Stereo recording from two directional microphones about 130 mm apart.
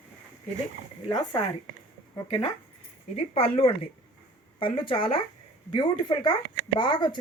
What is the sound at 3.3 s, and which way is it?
A woman's voice, 45° left (ahead or behind).